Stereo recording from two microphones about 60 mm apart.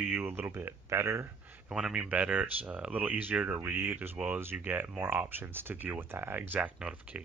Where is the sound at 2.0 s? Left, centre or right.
Right.